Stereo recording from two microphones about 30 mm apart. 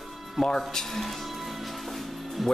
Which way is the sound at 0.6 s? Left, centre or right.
Centre.